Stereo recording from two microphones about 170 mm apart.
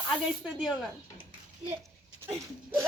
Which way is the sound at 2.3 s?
15° right (ahead or behind).